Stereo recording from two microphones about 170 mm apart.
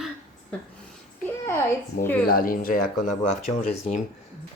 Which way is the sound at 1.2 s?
15° left (ahead or behind).